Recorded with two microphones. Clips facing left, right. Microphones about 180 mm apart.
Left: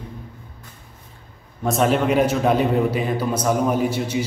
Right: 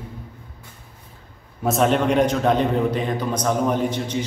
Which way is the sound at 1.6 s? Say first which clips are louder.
Even; centre (ahead or behind).